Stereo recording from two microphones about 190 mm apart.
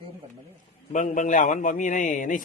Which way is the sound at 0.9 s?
40° left (ahead or behind).